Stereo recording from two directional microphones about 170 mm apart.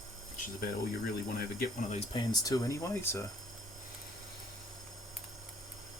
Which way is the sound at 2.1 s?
25° left (ahead or behind).